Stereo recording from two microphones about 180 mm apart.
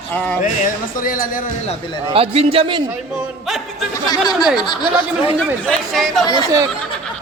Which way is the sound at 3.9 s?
20° left (ahead or behind).